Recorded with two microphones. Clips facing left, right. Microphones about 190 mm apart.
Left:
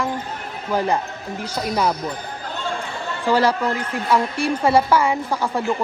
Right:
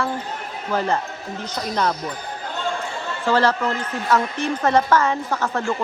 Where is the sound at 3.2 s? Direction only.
10° left (ahead or behind).